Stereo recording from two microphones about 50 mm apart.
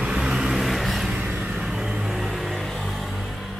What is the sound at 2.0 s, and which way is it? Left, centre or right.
Music, centre.